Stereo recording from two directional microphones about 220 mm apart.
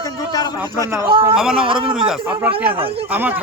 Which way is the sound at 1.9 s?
5° right (ahead or behind).